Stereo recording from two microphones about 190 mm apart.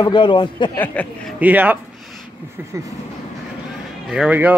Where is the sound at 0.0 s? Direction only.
25° left (ahead or behind).